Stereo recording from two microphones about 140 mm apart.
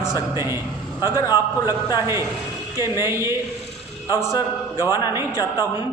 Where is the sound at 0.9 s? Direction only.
30° left (ahead or behind).